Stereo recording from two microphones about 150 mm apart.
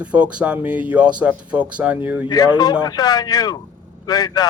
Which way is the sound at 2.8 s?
25° left (ahead or behind).